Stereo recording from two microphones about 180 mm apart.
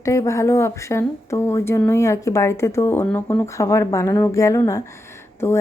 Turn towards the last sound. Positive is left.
turn(degrees=15)  # may be behind; listen again after turning